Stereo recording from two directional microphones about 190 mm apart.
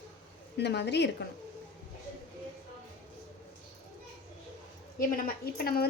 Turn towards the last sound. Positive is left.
turn(degrees=55)  # may be behind; listen again after turning